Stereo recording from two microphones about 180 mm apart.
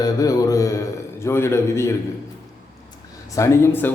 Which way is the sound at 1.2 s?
15° left (ahead or behind).